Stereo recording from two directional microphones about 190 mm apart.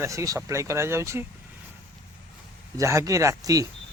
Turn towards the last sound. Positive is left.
turn(degrees=-20)  # may be behind; listen again after turning